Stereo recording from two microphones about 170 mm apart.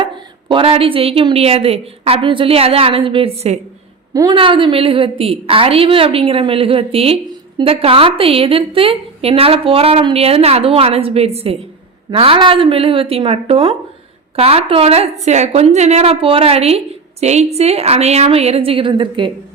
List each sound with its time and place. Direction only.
0.0 s a woman's voice: 30° right (ahead or behind)
4.1 s a woman's voice: 20° right (ahead or behind)